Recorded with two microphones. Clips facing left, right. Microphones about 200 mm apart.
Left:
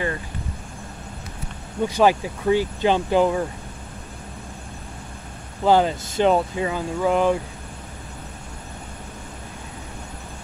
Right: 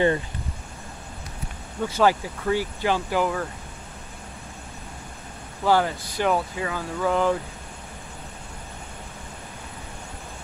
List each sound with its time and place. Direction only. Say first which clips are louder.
1.8 s speech: left 3 dB; 15° left (ahead or behind)
5.6 s speech: left 4 dB; 20° left (ahead or behind)